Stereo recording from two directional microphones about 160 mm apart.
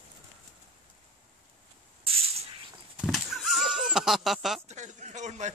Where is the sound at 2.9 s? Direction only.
Centre (ahead or behind).